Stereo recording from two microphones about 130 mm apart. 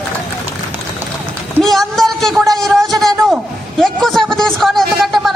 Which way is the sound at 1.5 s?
5° left (ahead or behind).